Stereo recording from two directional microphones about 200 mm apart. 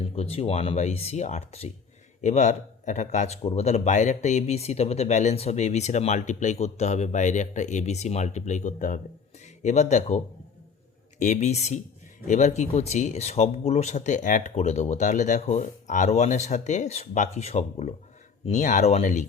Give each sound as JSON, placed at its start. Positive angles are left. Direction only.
{"t": 0.0, "sound": "speech", "side_deg": 30}
{"t": 11.2, "sound": "speech", "side_deg": 35}